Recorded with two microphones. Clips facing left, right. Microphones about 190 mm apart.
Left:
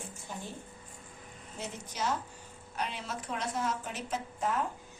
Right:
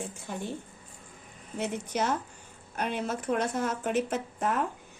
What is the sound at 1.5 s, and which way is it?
Speech, 65° right (ahead or behind).